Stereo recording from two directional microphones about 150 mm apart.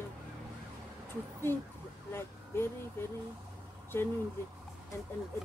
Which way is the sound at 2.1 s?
15° left (ahead or behind).